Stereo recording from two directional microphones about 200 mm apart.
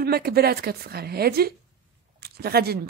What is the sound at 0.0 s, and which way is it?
Speech, 50° right (ahead or behind).